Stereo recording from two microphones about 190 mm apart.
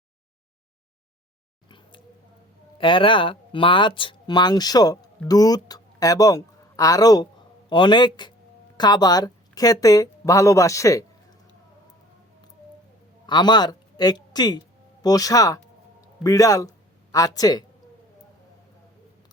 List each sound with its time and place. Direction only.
1.7 s a sound: 25° left (ahead or behind)
2.7 s a woman's voice: 25° left (ahead or behind)
13.2 s a man's voice: 20° left (ahead or behind)